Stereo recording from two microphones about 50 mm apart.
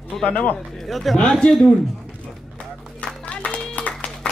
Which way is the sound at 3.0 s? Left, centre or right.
Left.